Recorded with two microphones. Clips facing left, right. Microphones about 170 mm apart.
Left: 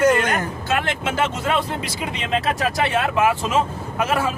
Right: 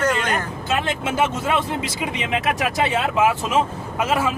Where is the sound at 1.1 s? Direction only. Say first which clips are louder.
Right 1 dB; 15° right (ahead or behind).